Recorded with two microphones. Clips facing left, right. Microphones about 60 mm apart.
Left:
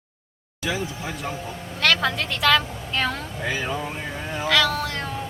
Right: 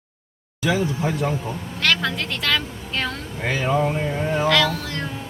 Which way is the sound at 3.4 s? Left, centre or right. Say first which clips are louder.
Right 5 dB; right.